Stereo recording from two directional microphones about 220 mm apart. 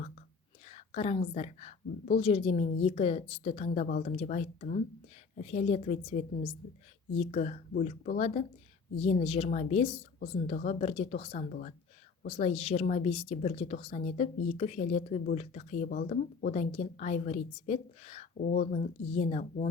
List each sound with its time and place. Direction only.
0.7 s a woman's voice: 30° left (ahead or behind)